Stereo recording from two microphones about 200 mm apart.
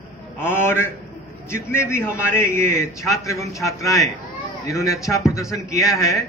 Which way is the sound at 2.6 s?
40° right (ahead or behind).